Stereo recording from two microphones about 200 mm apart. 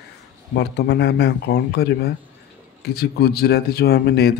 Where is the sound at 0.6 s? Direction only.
55° left (ahead or behind).